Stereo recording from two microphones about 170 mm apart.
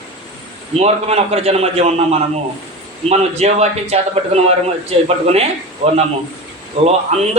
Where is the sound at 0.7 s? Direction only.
40° right (ahead or behind).